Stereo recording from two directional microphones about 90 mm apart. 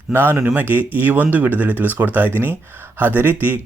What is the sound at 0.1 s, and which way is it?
Speech, 25° right (ahead or behind).